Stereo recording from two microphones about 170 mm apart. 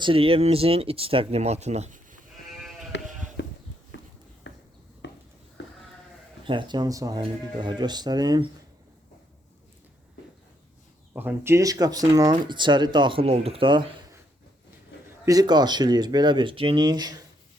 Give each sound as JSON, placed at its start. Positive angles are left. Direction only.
{"t": 0.0, "sound": "speech", "side_deg": -30}
{"t": 2.5, "sound": "sheep", "side_deg": 0}
{"t": 3.4, "sound": "a sound", "side_deg": 90}
{"t": 6.4, "sound": "speech", "side_deg": -30}
{"t": 11.1, "sound": "speech", "side_deg": -10}
{"t": 15.2, "sound": "speech", "side_deg": -20}